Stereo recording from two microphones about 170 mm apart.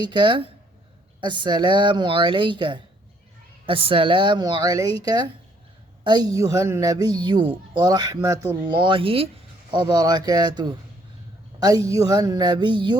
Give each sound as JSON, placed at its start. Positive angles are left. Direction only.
{"t": 0.0, "sound": "speech", "side_deg": -25}
{"t": 11.9, "sound": "speech", "side_deg": -20}